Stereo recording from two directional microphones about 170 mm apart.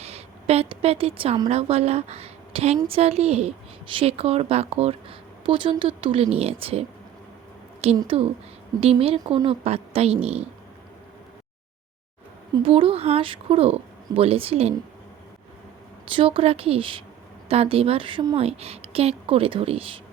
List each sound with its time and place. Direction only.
0.0 s a woman's voice: 35° right (ahead or behind)
7.9 s speech: 35° right (ahead or behind)
12.5 s speech: 30° right (ahead or behind)
16.1 s speech: 35° right (ahead or behind)